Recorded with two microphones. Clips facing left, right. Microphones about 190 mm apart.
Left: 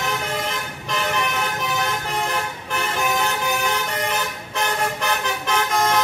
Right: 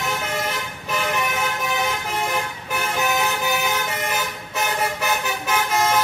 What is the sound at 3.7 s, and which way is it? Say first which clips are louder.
Vehicle: left 1 dB; 5° right (ahead or behind).